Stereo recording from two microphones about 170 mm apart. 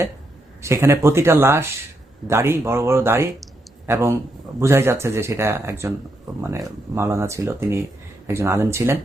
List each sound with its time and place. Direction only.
0.6 s speech: 15° right (ahead or behind)